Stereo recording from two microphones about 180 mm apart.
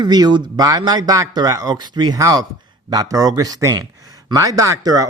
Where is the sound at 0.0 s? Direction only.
25° right (ahead or behind).